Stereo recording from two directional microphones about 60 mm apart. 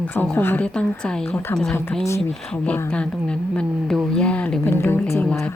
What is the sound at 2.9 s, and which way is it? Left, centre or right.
A woman's voice, centre.